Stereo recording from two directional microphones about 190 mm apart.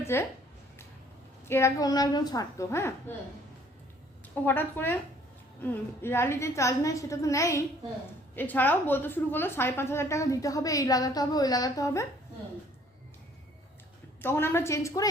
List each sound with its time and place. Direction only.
0.0 s speech: 15° left (ahead or behind)
1.5 s a woman's voice: 15° left (ahead or behind)
4.4 s a woman's voice: 10° left (ahead or behind)
14.2 s a woman's voice: 10° left (ahead or behind)